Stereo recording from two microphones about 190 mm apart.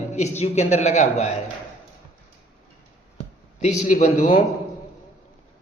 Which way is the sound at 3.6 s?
40° left (ahead or behind).